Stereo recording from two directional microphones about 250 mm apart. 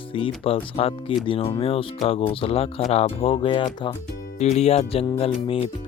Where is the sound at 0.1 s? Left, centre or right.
Left.